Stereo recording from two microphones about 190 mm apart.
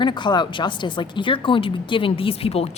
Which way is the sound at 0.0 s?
25° left (ahead or behind).